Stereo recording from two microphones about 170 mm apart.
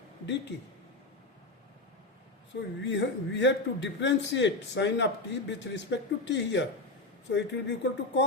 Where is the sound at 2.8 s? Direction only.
90° left.